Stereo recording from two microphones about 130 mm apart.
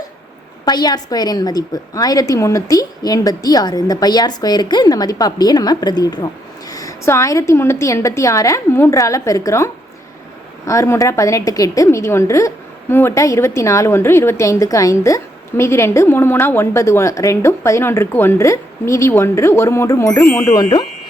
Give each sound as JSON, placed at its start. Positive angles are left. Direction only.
{"t": 0.6, "sound": "a woman's voice", "side_deg": 30}